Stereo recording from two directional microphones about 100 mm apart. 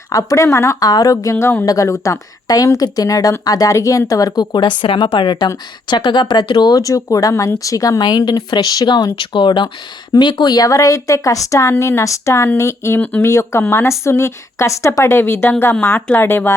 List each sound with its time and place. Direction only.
0.1 s a woman's voice: 35° left (ahead or behind)
4.8 s a woman's voice: 60° left (ahead or behind); by 16.6 s 25° left (ahead or behind)